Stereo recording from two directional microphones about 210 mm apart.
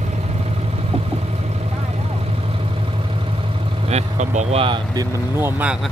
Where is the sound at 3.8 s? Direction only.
30° right (ahead or behind).